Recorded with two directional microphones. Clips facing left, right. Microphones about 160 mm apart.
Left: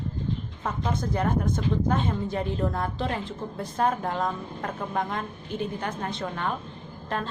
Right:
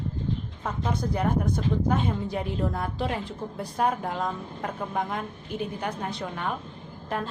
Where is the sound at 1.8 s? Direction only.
5° right (ahead or behind).